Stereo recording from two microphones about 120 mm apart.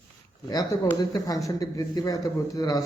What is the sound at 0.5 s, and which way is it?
Speech, 30° left (ahead or behind).